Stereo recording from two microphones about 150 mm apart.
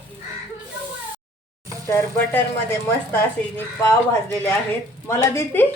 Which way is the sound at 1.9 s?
15° left (ahead or behind).